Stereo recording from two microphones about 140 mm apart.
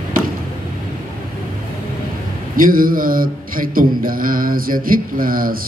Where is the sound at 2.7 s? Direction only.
90° right.